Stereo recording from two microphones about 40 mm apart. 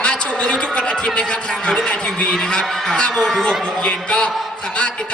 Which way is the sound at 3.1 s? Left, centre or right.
Centre.